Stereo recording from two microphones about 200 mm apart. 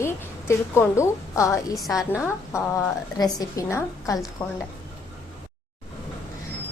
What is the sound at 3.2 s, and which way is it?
A woman's voice, 15° left (ahead or behind).